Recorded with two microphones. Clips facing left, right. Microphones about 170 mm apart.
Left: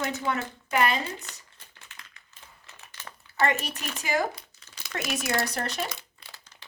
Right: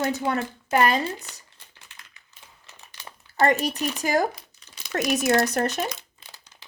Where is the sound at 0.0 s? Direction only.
35° right (ahead or behind).